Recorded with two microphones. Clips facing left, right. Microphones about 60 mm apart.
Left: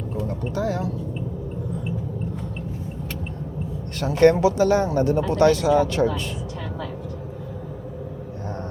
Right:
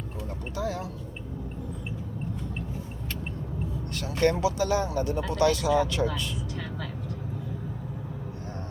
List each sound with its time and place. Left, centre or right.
3.9 s speech: left